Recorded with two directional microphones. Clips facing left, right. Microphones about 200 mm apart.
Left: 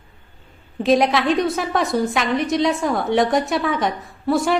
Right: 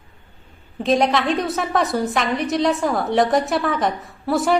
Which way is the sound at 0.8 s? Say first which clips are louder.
Left 1 dB; centre (ahead or behind).